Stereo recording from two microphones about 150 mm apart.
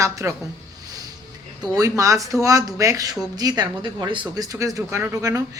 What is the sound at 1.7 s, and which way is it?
Speech, 20° right (ahead or behind).